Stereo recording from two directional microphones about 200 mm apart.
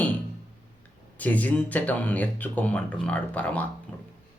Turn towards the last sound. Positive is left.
turn(degrees=5)  # may be behind; listen again after turning